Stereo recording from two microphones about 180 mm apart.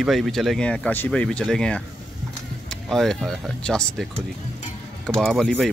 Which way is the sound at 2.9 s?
Centre (ahead or behind).